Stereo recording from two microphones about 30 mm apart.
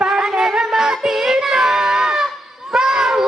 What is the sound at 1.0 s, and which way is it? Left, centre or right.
Child singing, centre.